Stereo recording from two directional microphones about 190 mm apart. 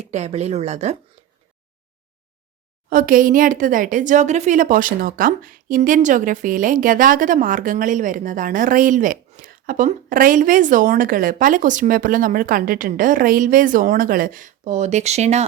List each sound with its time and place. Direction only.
0.0 s speech: 35° right (ahead or behind)
2.9 s speech: 45° right (ahead or behind)